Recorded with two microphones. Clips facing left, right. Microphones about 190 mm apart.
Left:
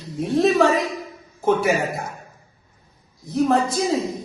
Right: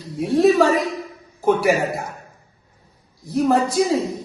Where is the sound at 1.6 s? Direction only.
Centre (ahead or behind).